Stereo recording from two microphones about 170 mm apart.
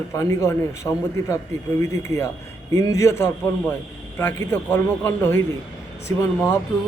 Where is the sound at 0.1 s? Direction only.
20° left (ahead or behind).